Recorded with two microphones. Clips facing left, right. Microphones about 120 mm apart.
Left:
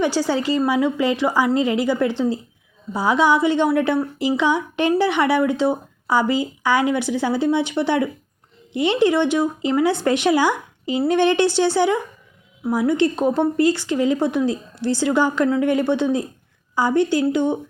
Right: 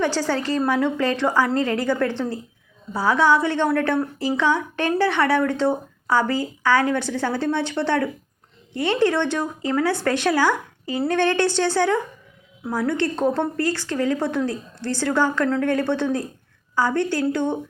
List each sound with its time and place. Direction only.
0.0 s a woman's voice: 15° left (ahead or behind)